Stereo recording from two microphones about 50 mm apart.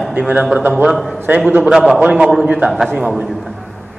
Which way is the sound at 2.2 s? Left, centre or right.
Centre.